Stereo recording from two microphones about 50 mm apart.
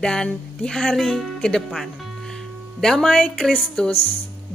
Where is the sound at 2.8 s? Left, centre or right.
Centre.